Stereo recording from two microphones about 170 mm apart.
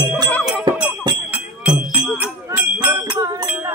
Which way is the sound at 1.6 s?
10° right (ahead or behind).